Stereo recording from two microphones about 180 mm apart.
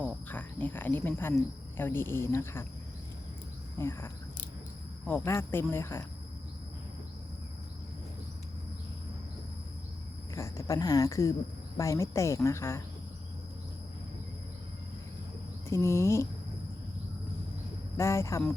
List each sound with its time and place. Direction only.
0.3 s speech: 10° left (ahead or behind)
3.8 s speech: 15° left (ahead or behind)
10.3 s speech: 15° left (ahead or behind)
15.7 s speech: 15° left (ahead or behind)
17.9 s speech: 15° left (ahead or behind)